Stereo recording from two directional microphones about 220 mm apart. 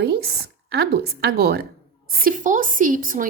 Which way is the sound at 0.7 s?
45° right (ahead or behind).